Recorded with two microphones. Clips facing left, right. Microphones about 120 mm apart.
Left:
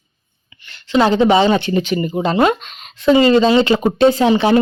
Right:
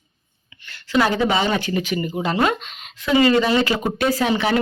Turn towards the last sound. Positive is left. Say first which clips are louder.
# left 7 dB
turn(degrees=25)  # may be behind; listen again after turning